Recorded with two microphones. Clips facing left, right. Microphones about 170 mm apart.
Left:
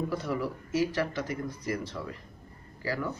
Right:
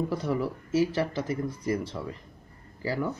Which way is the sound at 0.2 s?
25° right (ahead or behind).